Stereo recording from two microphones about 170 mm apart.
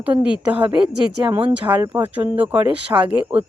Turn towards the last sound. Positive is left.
turn(degrees=-10)  # may be behind; listen again after turning